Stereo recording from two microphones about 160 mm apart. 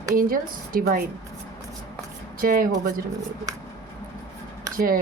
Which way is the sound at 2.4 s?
65° right (ahead or behind).